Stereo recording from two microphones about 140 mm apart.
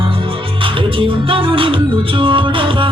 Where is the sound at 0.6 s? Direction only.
40° right (ahead or behind).